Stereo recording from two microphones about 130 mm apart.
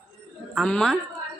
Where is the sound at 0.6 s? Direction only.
5° left (ahead or behind).